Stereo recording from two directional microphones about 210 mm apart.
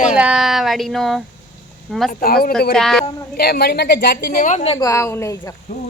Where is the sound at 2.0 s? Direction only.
45° left (ahead or behind).